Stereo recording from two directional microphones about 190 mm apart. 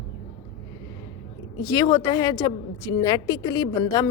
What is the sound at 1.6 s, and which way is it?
A woman's voice, 20° left (ahead or behind).